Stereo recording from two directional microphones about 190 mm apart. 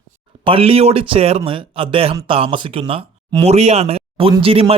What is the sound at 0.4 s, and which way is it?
Speech, 30° right (ahead or behind).